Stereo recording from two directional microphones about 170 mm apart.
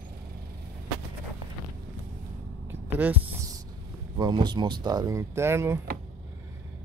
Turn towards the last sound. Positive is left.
turn(degrees=-15)  # may be behind; listen again after turning